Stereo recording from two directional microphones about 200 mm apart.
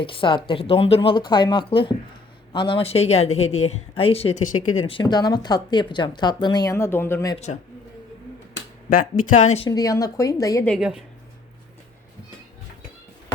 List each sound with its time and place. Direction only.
0.0 s speech: 25° left (ahead or behind)
8.9 s speech: 40° left (ahead or behind)
9.6 s speech: 20° left (ahead or behind)
10.7 s a woman's voice: 5° right (ahead or behind)